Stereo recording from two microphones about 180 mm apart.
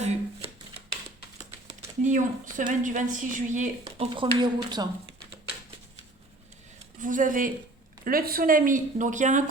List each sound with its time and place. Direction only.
0.0 s shuffling cards: 35° right (ahead or behind)
2.0 s speech: 45° right (ahead or behind)
3.8 s speech: 30° right (ahead or behind)
7.0 s speech: 45° right (ahead or behind)